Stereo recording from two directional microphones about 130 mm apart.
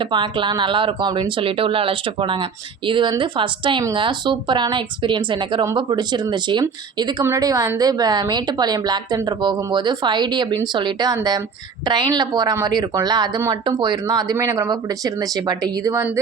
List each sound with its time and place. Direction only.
0.0 s a woman's voice: 40° right (ahead or behind)